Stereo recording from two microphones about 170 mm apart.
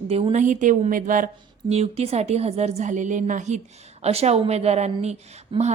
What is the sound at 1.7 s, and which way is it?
A woman's voice, 40° right (ahead or behind).